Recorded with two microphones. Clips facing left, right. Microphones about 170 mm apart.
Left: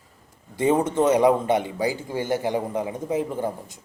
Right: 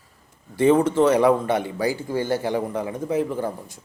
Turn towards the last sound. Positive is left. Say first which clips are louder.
# right 1 dB
turn(degrees=20)  # may be behind; listen again after turning